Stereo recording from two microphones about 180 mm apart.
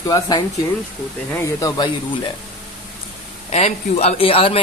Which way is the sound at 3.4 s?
35° left (ahead or behind).